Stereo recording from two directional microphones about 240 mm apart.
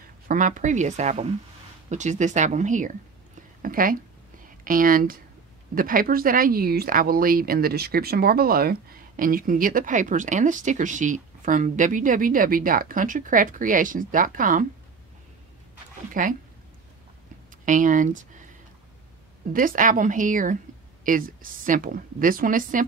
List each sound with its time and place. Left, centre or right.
0.3 s speech: right
16.1 s speech: right
17.6 s speech: right
19.5 s speech: right